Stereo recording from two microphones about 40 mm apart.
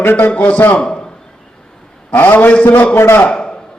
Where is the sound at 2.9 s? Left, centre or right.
Left.